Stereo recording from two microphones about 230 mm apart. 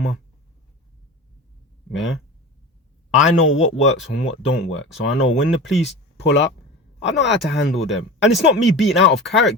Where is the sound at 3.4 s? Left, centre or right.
Left.